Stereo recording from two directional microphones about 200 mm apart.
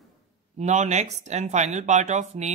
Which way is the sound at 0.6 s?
35° right (ahead or behind).